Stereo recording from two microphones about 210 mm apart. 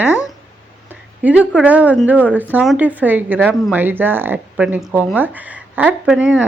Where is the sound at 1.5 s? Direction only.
5° right (ahead or behind).